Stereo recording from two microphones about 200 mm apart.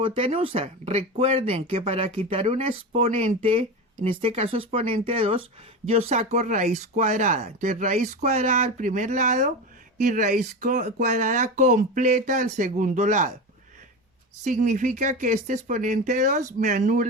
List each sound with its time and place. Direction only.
0.0 s speech: 30° right (ahead or behind)
14.4 s speech: 40° right (ahead or behind)